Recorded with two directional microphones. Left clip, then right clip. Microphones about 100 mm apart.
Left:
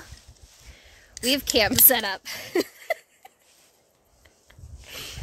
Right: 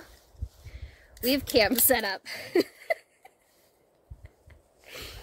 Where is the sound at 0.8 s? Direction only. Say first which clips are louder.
Left 3 dB; 15° left (ahead or behind).